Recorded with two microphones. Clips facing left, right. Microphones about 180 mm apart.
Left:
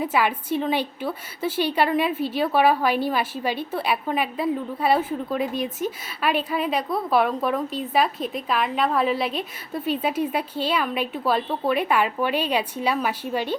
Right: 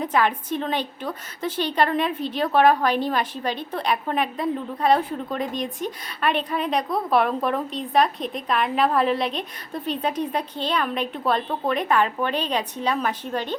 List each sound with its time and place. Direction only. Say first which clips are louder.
0.0 s a woman's voice: right 1 dB; 5° left (ahead or behind)